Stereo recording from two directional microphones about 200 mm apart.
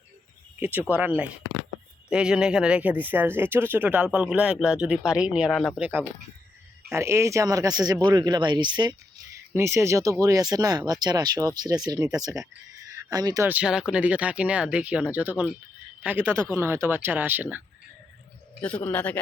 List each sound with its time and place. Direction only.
0.6 s speech: 10° right (ahead or behind)
18.6 s a man's voice: 5° left (ahead or behind)